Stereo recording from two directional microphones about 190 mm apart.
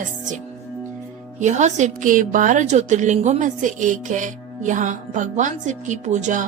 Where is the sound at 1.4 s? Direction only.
40° right (ahead or behind).